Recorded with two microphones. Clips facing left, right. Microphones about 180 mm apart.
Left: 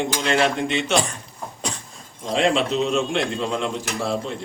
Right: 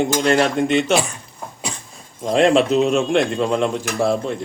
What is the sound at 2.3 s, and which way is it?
Cutlery, 50° right (ahead or behind).